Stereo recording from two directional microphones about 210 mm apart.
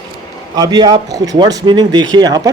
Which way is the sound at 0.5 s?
20° right (ahead or behind).